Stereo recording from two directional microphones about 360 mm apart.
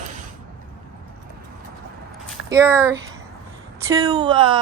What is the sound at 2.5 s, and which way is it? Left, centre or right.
A woman's voice, centre.